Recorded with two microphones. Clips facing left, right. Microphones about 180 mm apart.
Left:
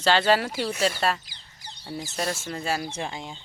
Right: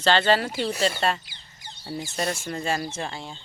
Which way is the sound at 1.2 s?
40° left (ahead or behind).